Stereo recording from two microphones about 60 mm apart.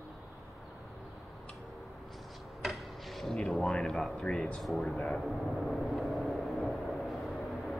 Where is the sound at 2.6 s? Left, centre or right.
Centre.